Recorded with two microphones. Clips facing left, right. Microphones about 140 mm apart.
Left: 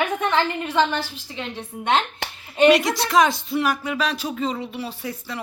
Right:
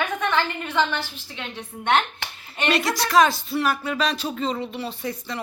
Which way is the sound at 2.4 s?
15° left (ahead or behind).